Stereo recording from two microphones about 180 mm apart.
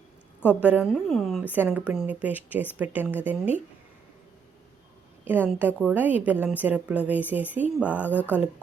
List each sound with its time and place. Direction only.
0.4 s a woman's voice: 5° right (ahead or behind)
5.2 s a woman's voice: 10° right (ahead or behind)
8.0 s speech: 10° left (ahead or behind)